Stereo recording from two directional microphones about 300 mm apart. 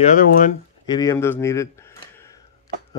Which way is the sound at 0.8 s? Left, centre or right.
Centre.